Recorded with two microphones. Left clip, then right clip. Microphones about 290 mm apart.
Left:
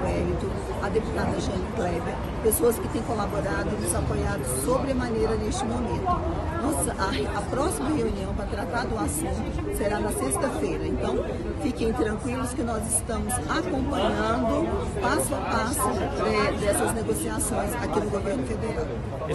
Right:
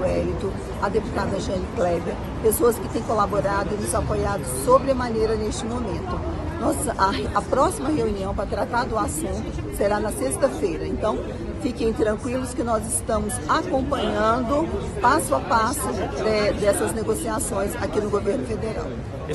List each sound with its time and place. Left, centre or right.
2.4 s speech: centre
6.7 s speech: centre